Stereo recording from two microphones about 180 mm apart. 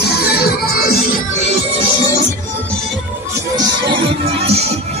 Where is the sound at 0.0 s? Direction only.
60° left (ahead or behind).